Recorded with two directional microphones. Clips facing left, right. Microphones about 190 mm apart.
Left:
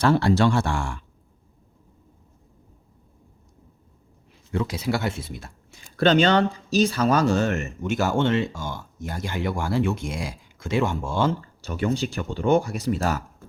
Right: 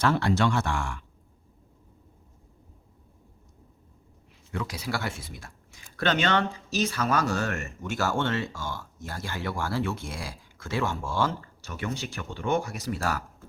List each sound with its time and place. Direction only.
0.0 s speech: 30° left (ahead or behind)
4.5 s speech: 25° left (ahead or behind)